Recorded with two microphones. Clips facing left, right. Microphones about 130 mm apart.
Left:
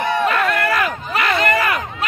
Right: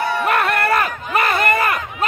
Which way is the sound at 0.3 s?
60° right (ahead or behind).